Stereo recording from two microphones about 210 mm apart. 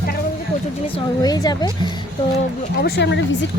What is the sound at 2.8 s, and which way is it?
Speech, 50° left (ahead or behind).